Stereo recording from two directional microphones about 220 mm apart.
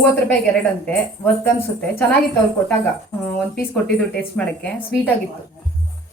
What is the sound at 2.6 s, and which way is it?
A woman's voice, 5° left (ahead or behind).